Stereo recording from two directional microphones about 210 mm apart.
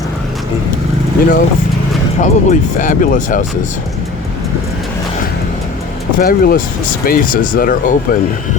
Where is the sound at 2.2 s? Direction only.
35° left (ahead or behind).